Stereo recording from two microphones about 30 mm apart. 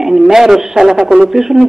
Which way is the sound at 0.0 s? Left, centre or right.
Centre.